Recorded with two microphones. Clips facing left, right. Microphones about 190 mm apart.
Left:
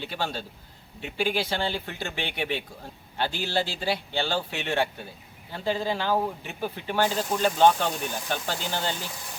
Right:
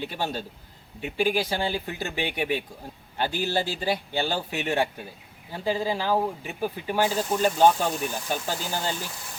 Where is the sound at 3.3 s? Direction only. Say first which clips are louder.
Right 4 dB; 45° right (ahead or behind).